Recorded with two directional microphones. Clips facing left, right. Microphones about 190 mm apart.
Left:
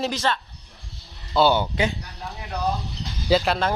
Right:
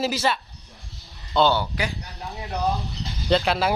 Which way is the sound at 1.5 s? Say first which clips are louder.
Left 3 dB; 20° left (ahead or behind).